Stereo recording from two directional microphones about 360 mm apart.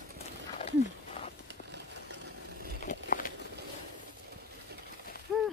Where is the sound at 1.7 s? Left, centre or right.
Right.